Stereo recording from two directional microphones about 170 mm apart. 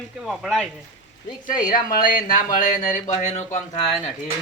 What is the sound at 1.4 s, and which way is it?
Speech, 55° left (ahead or behind).